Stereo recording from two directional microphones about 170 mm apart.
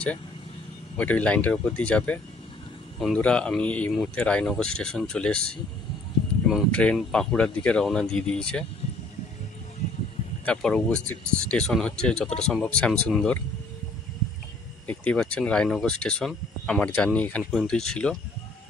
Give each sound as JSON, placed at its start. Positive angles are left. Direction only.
{"t": 0.9, "sound": "speech", "side_deg": 10}
{"t": 10.4, "sound": "speech", "side_deg": 5}
{"t": 14.9, "sound": "speech", "side_deg": 5}